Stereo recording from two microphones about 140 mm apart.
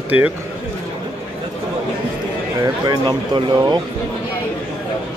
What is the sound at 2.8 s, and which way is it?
Speech, 30° right (ahead or behind).